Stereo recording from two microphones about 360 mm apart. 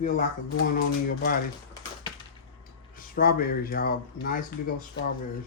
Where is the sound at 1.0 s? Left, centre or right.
Left.